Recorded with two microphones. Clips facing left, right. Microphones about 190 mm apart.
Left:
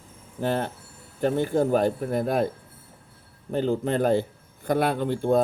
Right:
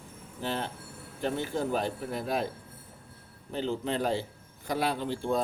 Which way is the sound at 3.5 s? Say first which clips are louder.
Left 7 dB; 50° left (ahead or behind).